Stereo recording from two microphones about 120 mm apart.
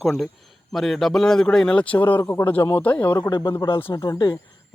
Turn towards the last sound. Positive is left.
turn(degrees=35)  # may be behind; listen again after turning